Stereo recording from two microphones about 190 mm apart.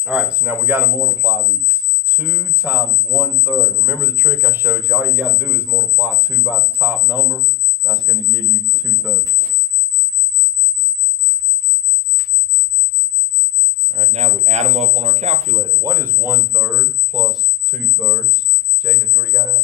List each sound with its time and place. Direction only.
0.0 s speech: 5° right (ahead or behind)
7.9 s speech: centre (ahead or behind)
13.8 s speech: 35° right (ahead or behind)
15.5 s speech: 15° right (ahead or behind)